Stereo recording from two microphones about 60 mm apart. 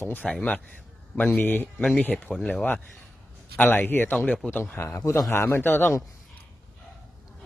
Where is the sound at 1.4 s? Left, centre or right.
Left.